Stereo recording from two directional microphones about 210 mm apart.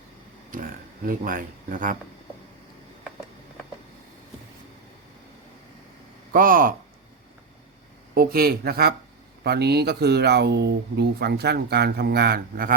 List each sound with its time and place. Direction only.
0.5 s speech: 40° right (ahead or behind)
6.3 s speech: 40° right (ahead or behind)
8.1 s speech: 45° right (ahead or behind)